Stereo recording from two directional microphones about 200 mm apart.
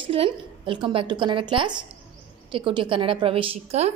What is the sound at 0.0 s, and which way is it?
A woman's voice, 25° right (ahead or behind).